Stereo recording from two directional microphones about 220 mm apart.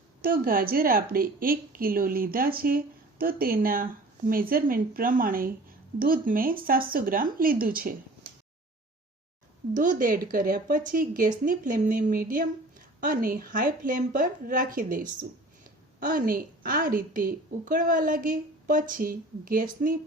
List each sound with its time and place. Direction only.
0.2 s a woman's voice: 40° right (ahead or behind)
9.7 s a woman's voice: 35° right (ahead or behind)